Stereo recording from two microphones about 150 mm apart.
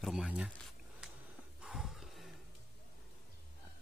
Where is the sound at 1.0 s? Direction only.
5° right (ahead or behind).